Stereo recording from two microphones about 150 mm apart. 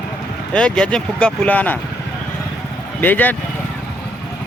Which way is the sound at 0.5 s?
5° left (ahead or behind).